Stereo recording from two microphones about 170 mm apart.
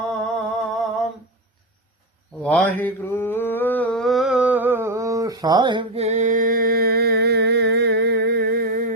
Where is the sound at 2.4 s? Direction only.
10° left (ahead or behind).